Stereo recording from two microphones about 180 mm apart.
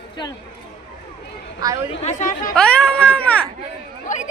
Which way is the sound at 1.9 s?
40° left (ahead or behind).